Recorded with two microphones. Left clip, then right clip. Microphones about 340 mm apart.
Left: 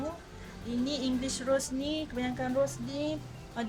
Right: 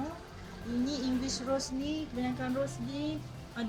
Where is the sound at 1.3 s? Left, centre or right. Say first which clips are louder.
Left 6 dB; left.